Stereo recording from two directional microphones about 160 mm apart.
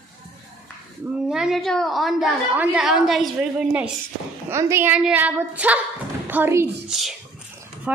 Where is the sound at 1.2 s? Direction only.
5° right (ahead or behind).